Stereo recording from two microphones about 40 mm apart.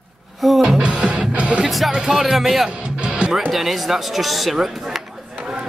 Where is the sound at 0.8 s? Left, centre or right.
Right.